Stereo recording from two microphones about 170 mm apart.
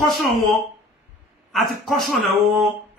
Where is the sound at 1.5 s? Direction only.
Centre (ahead or behind).